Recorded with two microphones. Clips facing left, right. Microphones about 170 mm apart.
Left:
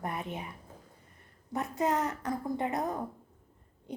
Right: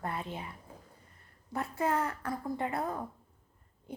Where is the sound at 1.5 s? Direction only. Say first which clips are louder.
Left 1 dB; 20° left (ahead or behind).